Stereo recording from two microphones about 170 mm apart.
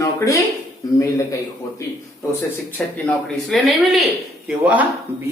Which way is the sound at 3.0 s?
Centre (ahead or behind).